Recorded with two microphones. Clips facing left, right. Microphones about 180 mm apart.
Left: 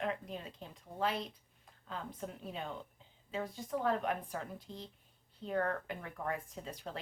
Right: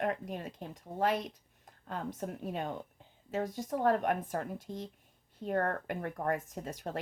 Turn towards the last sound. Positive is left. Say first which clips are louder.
# right 5 dB
turn(degrees=-45)  # may be behind; listen again after turning